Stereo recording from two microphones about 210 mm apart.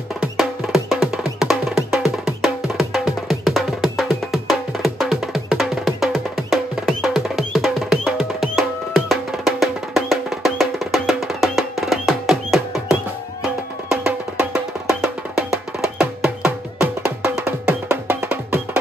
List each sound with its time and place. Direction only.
0.4 s music: centre (ahead or behind)